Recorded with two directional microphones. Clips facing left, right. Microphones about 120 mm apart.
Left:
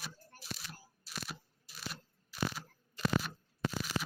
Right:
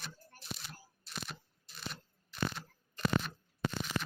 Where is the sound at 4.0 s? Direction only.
25° left (ahead or behind).